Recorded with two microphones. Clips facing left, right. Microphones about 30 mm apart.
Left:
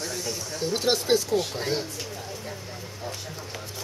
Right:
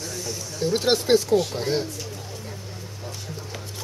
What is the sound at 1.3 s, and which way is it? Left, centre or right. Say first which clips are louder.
Speech: right 4 dB; centre.